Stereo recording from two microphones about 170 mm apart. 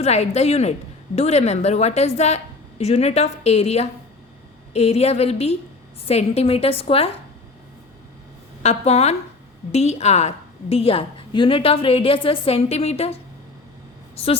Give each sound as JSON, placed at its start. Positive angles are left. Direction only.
{"t": 0.0, "sound": "a woman's voice", "side_deg": 40}
{"t": 8.6, "sound": "a woman's voice", "side_deg": 40}